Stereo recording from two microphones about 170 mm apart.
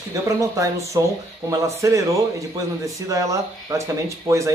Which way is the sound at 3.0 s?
20° right (ahead or behind).